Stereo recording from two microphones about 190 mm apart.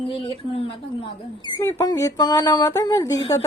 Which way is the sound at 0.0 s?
30° left (ahead or behind).